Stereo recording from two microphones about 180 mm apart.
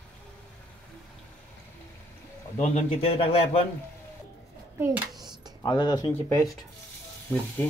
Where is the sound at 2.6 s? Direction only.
35° left (ahead or behind).